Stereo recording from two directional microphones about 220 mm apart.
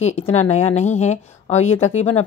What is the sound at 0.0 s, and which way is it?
Speech, 30° left (ahead or behind).